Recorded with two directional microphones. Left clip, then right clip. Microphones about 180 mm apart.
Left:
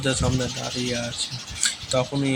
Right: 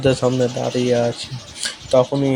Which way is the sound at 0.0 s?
30° right (ahead or behind).